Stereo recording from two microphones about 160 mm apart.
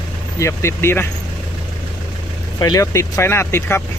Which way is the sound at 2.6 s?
25° left (ahead or behind).